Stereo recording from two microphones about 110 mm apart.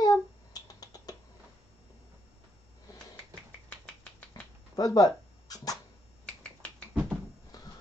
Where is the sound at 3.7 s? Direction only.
15° left (ahead or behind).